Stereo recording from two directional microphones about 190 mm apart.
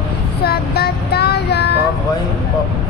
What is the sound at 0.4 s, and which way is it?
Child singing, 55° left (ahead or behind).